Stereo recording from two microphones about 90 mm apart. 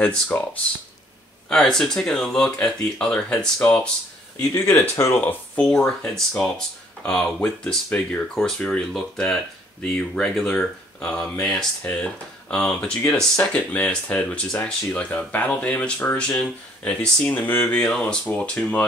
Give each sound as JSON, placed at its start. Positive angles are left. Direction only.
{"t": 0.0, "sound": "speech", "side_deg": 15}
{"t": 1.5, "sound": "speech", "side_deg": 5}
{"t": 5.2, "sound": "speech", "side_deg": 15}
{"t": 5.8, "sound": "speech", "side_deg": 5}
{"t": 17.7, "sound": "speech", "side_deg": 10}